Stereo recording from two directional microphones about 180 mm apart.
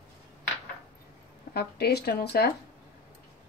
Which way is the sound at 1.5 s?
65° left (ahead or behind).